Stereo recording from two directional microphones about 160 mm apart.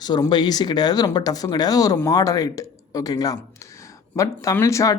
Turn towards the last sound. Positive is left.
turn(degrees=20)  # may be behind; listen again after turning